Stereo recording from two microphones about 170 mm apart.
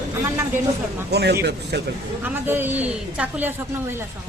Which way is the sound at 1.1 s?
75° right (ahead or behind).